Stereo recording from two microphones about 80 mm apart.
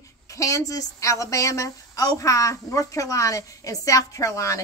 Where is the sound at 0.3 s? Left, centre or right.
Left.